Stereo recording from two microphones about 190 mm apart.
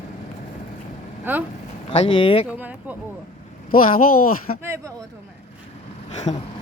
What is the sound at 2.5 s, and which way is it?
Speech, 10° right (ahead or behind).